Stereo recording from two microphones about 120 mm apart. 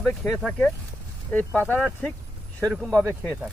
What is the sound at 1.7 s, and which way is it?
Speech, 10° left (ahead or behind).